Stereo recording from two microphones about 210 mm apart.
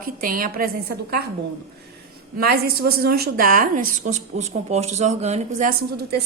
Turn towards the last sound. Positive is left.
turn(degrees=-45)  # may be behind; listen again after turning